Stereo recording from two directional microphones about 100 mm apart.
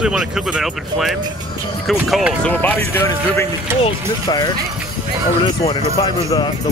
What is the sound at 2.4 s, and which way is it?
Speech, 20° left (ahead or behind).